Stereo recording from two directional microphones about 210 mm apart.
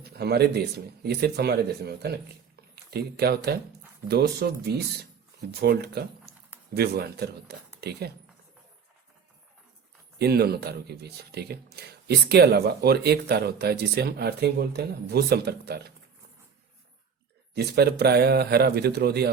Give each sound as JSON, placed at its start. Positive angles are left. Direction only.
{"t": 0.0, "sound": "speech", "side_deg": -50}
{"t": 10.2, "sound": "speech", "side_deg": -50}
{"t": 17.5, "sound": "speech", "side_deg": -50}